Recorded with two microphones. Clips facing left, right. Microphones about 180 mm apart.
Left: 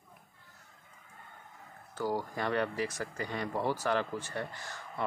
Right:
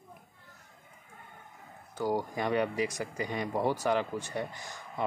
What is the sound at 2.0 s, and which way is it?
Speech, 15° right (ahead or behind).